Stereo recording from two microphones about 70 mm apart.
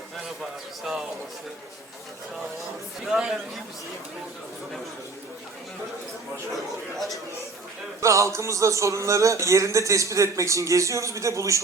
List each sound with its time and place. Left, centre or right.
0.9 s a man's voice: centre
3.0 s a man's voice: centre
8.0 s music: right